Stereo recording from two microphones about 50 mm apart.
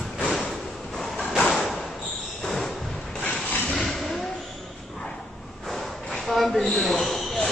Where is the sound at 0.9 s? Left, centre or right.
Centre.